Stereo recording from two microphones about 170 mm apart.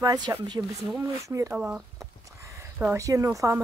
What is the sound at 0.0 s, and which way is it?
Speech, 20° right (ahead or behind).